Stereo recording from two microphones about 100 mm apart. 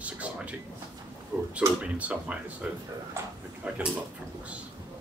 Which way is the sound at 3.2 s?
25° right (ahead or behind).